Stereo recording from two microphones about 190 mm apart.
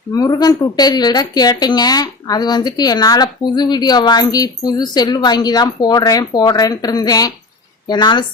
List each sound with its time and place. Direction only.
0.1 s a woman's voice: 20° left (ahead or behind)